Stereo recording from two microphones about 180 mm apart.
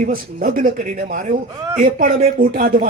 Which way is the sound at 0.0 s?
50° right (ahead or behind).